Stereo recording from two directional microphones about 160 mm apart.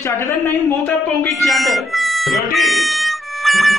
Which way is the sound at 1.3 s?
Centre (ahead or behind).